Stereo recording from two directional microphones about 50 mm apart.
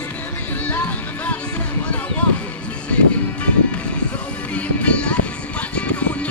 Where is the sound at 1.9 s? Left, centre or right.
Left.